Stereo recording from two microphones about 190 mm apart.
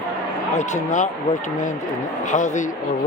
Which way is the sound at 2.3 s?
40° left (ahead or behind).